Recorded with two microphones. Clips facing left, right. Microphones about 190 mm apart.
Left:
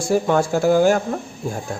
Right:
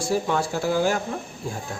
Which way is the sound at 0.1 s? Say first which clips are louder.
Left 7 dB; 50° left (ahead or behind).